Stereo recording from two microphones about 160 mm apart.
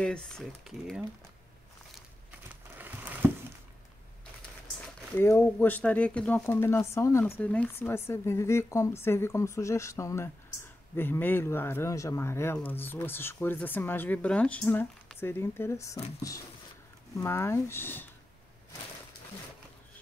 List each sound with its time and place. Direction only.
0.0 s speech: 5° left (ahead or behind)
2.8 s a sound: 10° right (ahead or behind)
5.1 s speech: 15° left (ahead or behind)
17.1 s speech: 15° left (ahead or behind)